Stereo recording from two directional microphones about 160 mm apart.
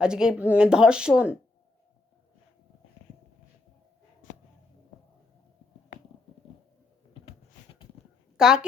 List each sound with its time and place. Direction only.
0.0 s speech: 5° right (ahead or behind)
7.1 s a sound: 35° left (ahead or behind)
8.4 s a woman's voice: 5° right (ahead or behind)